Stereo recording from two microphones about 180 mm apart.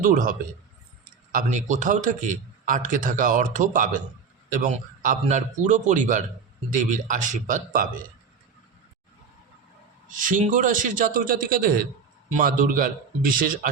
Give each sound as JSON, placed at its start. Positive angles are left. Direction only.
{"t": 0.0, "sound": "a man's voice", "side_deg": -50}
{"t": 10.2, "sound": "a man's voice", "side_deg": -45}